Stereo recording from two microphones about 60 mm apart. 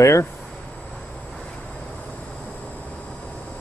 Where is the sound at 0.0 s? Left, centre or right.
Left.